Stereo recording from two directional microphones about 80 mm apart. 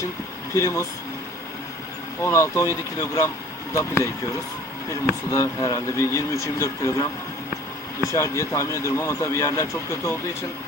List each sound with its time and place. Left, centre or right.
0.5 s speech: left
2.2 s speech: left
8.0 s speech: left